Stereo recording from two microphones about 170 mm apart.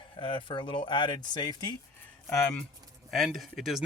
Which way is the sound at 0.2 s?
30° left (ahead or behind).